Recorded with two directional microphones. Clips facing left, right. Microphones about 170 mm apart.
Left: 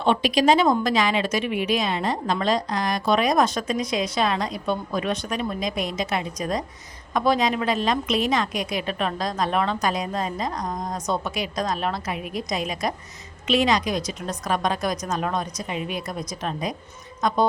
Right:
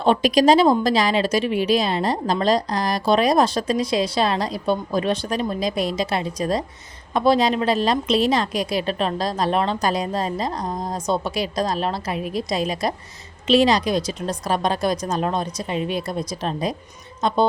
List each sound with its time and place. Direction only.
0.0 s a woman's voice: 40° right (ahead or behind)